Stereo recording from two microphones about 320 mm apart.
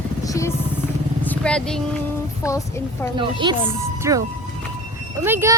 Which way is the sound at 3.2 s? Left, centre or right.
Centre.